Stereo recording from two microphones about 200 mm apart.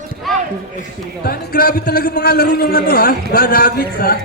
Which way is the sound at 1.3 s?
50° left (ahead or behind).